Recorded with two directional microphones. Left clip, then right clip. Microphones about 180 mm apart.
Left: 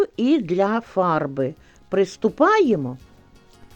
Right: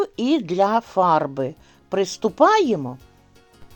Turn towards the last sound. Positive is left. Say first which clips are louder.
# left 1 dB
turn(degrees=20)  # may be behind; listen again after turning